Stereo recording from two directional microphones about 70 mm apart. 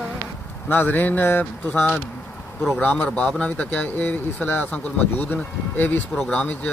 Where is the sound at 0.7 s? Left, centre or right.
Left.